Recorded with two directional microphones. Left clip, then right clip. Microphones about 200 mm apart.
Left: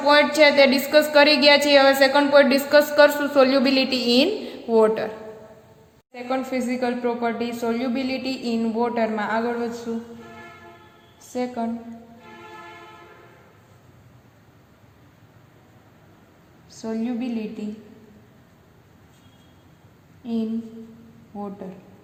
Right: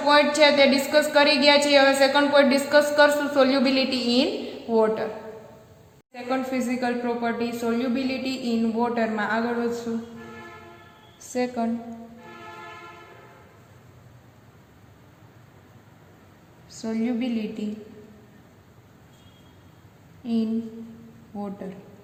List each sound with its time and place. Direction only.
0.0 s a woman's voice: 30° left (ahead or behind)
6.1 s a woman's voice: 25° left (ahead or behind)
11.3 s a woman's voice: 5° left (ahead or behind)
16.6 s a woman's voice: 5° left (ahead or behind)
20.2 s a woman's voice: 5° left (ahead or behind)